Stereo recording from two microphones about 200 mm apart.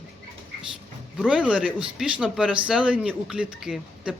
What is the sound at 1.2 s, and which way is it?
Speech, 5° right (ahead or behind).